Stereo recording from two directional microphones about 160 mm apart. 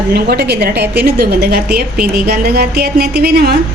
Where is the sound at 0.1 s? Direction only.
85° right.